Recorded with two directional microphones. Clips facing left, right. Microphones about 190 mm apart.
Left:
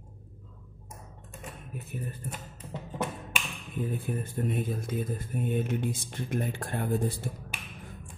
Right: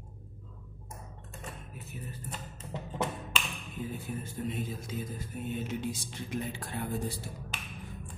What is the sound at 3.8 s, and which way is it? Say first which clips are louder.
Speech: left 6 dB; 55° left (ahead or behind).